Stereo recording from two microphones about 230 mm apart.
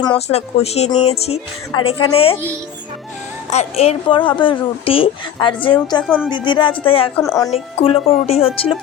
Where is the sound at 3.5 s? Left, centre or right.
Left.